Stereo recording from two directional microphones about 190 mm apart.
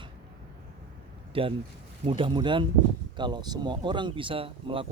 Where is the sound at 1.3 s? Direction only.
30° right (ahead or behind).